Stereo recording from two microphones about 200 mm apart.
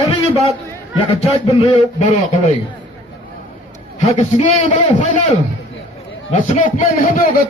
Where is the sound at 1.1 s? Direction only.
30° left (ahead or behind).